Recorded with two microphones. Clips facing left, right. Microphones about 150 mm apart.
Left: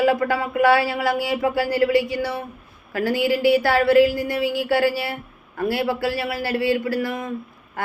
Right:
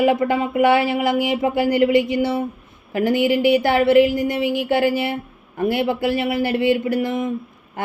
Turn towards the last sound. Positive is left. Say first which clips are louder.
# right 2 dB
turn(degrees=-20)  # may be behind; listen again after turning